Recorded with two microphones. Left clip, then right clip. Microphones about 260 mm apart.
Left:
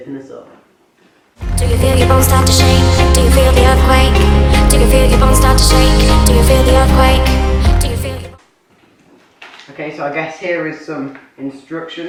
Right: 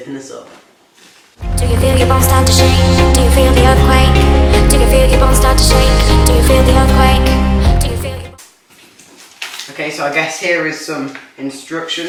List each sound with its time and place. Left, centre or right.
0.1 s speech: centre
1.5 s speech: centre
10.4 s speech: centre